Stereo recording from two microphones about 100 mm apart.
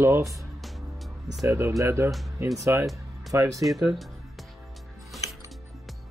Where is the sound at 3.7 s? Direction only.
Centre (ahead or behind).